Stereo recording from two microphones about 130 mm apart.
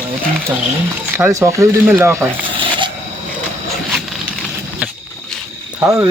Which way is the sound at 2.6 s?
40° right (ahead or behind).